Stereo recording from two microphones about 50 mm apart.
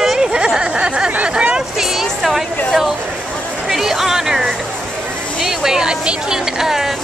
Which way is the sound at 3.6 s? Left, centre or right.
Centre.